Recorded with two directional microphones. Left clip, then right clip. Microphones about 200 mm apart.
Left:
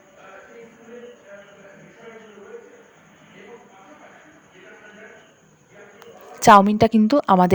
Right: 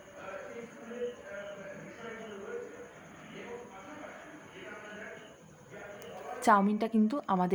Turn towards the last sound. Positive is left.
turn(degrees=50)  # may be behind; listen again after turning